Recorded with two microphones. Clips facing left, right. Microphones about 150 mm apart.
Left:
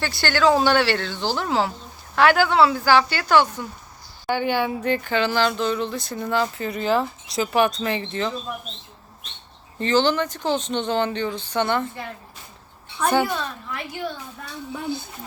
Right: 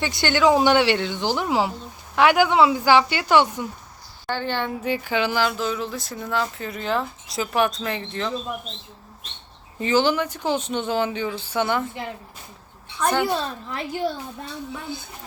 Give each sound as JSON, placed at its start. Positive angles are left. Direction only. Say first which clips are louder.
{"t": 0.0, "sound": "speech", "louder": "right 1 dB", "side_deg": -20}
{"t": 4.3, "sound": "speech", "louder": "left 4 dB", "side_deg": 10}
{"t": 4.8, "sound": "speech", "louder": "left 1 dB", "side_deg": -5}
{"t": 9.7, "sound": "speech", "louder": "even", "side_deg": -10}
{"t": 13.0, "sound": "speech", "louder": "left 2 dB", "side_deg": 5}
{"t": 13.2, "sound": "a woman's voice", "louder": "right 3 dB", "side_deg": -30}